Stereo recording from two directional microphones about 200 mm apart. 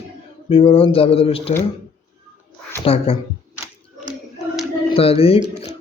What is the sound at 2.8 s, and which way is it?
Speech, 30° left (ahead or behind).